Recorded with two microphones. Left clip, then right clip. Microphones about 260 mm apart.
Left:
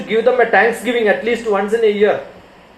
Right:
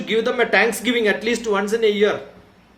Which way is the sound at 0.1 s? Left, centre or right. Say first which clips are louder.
Left 5 dB; right.